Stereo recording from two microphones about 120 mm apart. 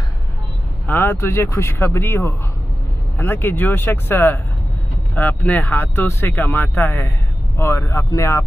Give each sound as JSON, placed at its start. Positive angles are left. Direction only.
{"t": 0.8, "sound": "speech", "side_deg": 20}